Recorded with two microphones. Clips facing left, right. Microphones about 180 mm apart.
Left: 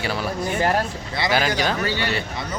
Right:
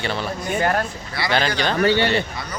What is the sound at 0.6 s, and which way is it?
Speech, 25° left (ahead or behind).